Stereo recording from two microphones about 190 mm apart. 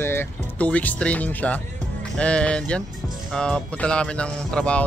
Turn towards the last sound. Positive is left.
turn(degrees=5)  # may be behind; listen again after turning